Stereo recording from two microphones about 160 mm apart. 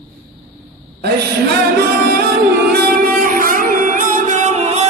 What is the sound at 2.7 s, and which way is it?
Music, 65° right (ahead or behind).